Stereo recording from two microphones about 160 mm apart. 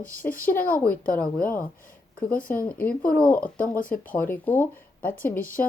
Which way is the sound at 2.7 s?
10° left (ahead or behind).